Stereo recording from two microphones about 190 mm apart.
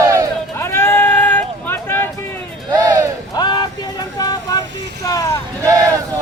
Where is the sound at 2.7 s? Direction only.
20° right (ahead or behind).